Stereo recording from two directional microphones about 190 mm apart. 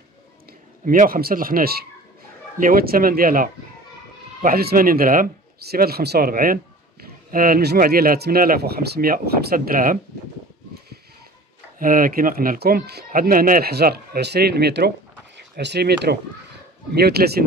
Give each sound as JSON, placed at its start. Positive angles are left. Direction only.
{"t": 0.8, "sound": "speech", "side_deg": -45}
{"t": 11.8, "sound": "speech", "side_deg": -45}